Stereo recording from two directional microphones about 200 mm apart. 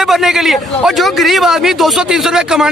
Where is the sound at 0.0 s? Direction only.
Centre (ahead or behind).